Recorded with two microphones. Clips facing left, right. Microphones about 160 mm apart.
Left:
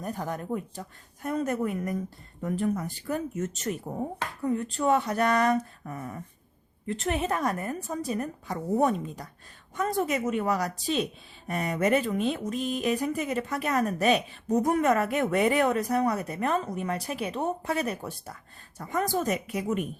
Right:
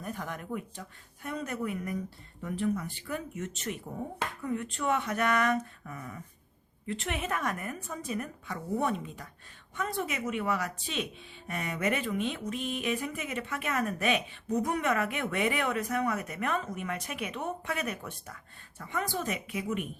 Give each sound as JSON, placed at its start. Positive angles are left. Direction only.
{"t": 0.0, "sound": "speech", "side_deg": 35}